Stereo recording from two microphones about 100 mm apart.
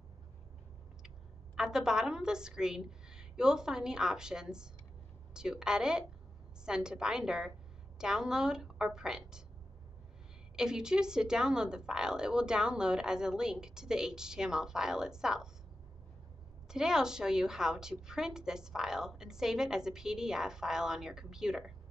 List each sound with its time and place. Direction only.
1.0 s a woman's voice: 5° right (ahead or behind)
10.5 s a woman's voice: 5° right (ahead or behind)
16.6 s a woman's voice: 5° right (ahead or behind)